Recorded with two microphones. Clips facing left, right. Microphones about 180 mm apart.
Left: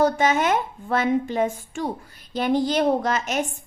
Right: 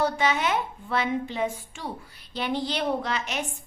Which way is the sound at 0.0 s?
45° left (ahead or behind).